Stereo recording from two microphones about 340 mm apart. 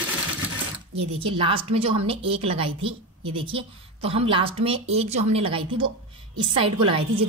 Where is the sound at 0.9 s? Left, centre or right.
Centre.